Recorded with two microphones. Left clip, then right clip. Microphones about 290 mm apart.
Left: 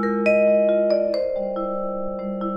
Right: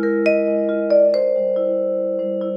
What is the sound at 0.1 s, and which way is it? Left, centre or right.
Music, right.